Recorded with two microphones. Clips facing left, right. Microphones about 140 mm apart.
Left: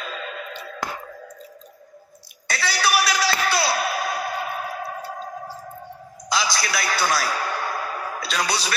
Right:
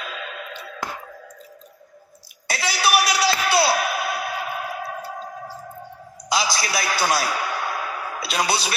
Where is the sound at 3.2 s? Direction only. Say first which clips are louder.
Right 3 dB; 30° right (ahead or behind).